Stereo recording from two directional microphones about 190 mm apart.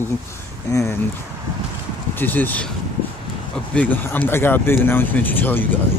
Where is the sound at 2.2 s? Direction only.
10° left (ahead or behind).